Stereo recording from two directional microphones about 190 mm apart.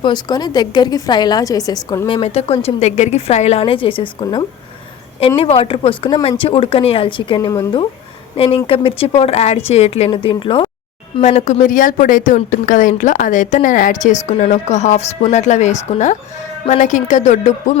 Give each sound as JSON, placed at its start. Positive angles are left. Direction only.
{"t": 0.0, "sound": "a woman's voice", "side_deg": 20}
{"t": 11.2, "sound": "speech", "side_deg": 40}